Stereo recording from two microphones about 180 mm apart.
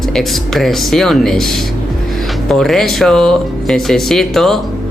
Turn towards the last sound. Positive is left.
turn(degrees=0)  # may be behind; listen again after turning